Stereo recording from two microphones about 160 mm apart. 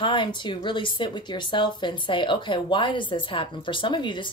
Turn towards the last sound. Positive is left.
turn(degrees=30)  # may be behind; listen again after turning